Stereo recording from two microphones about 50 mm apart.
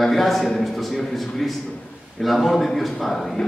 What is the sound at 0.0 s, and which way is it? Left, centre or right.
A man's voice, centre.